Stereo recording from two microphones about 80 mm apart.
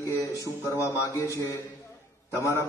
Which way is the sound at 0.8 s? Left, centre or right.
Left.